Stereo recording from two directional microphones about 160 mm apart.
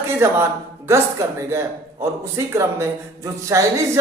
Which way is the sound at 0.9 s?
15° right (ahead or behind).